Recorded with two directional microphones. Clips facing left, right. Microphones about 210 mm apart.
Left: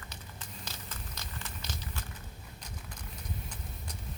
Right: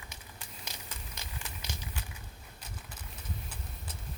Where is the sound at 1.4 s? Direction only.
10° right (ahead or behind).